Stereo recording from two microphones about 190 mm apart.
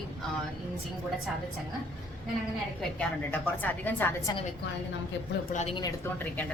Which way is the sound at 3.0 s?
10° left (ahead or behind).